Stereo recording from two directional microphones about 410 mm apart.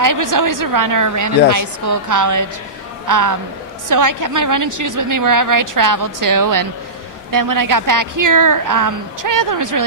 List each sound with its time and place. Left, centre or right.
0.0 s a woman's voice: right